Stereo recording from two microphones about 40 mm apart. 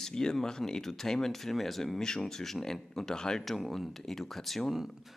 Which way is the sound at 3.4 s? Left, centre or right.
Centre.